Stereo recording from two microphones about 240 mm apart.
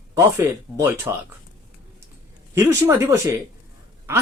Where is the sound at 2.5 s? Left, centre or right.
Centre.